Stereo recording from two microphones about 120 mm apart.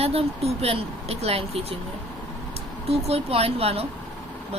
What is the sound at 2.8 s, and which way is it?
A woman's voice, 55° right (ahead or behind).